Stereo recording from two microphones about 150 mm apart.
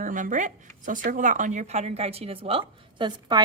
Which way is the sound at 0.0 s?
60° right (ahead or behind).